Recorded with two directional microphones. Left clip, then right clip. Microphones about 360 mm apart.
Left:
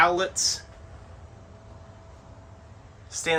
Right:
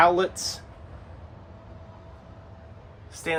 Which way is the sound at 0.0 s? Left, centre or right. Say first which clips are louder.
Right 1 dB; centre.